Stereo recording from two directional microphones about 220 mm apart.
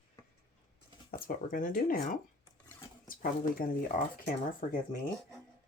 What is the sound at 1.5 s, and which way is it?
Speech, 40° left (ahead or behind).